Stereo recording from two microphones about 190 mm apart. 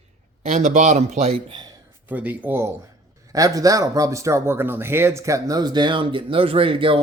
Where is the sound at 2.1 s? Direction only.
10° right (ahead or behind).